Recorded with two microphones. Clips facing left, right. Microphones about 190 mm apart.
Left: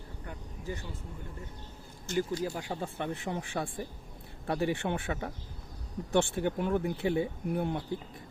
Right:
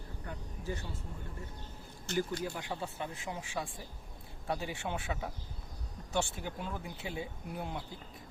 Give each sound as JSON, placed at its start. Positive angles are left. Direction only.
{"t": 2.1, "sound": "speech", "side_deg": -65}
{"t": 2.4, "sound": "speech", "side_deg": 40}
{"t": 3.0, "sound": "speech", "side_deg": 60}